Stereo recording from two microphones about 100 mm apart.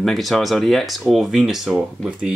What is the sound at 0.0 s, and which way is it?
Speech, centre (ahead or behind).